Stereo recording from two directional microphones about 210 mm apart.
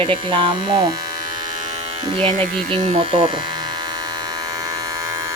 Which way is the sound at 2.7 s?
25° right (ahead or behind).